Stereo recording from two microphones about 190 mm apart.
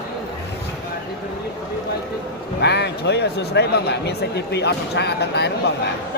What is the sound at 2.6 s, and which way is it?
Speech, 60° left (ahead or behind).